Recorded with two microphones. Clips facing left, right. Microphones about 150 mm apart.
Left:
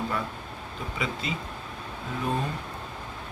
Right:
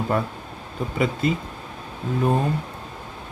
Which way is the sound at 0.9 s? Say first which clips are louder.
Right 10 dB; 50° right (ahead or behind).